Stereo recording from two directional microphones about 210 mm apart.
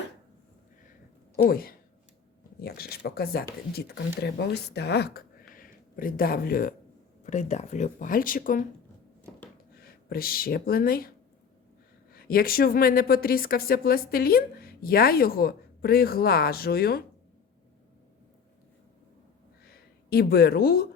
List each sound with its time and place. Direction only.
1.4 s a woman's voice: 45° left (ahead or behind)
9.7 s speech: 45° left (ahead or behind)
12.1 s a woman's voice: 45° left (ahead or behind)
19.6 s a sound: 45° left (ahead or behind)